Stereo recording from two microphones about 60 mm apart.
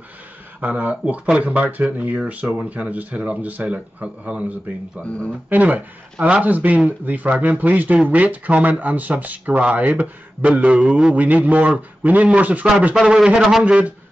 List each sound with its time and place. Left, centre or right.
0.6 s a man's voice: right
5.0 s speech: left
5.5 s a man's voice: right
10.8 s a man's voice: centre
11.1 s a man's voice: right
12.9 s a man's voice: centre